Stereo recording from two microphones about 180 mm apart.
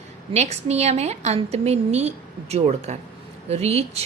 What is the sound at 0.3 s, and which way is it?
A woman's voice, 40° right (ahead or behind).